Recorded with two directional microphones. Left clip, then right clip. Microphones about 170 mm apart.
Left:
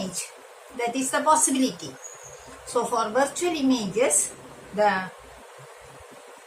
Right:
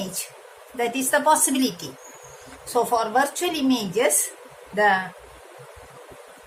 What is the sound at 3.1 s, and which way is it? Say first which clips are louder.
Speech: right 2 dB; 50° right (ahead or behind).